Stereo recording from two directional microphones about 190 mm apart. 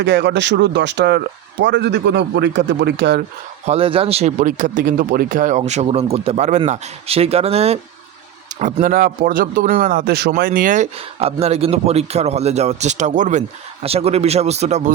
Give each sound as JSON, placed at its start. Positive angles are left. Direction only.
{"t": 0.0, "sound": "speech", "side_deg": -60}
{"t": 3.7, "sound": "a man's voice", "side_deg": -30}
{"t": 8.5, "sound": "a man's voice", "side_deg": -45}